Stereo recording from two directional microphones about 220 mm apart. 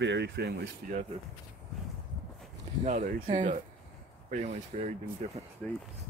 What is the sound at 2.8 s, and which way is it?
Speech, 40° right (ahead or behind).